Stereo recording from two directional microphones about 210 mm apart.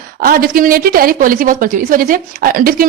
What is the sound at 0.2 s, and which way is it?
A woman's voice, 45° right (ahead or behind).